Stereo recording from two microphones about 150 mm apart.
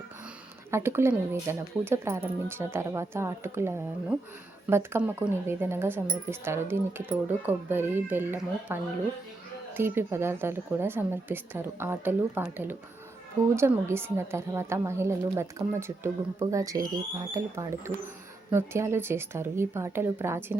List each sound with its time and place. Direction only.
0.7 s speech: 15° right (ahead or behind)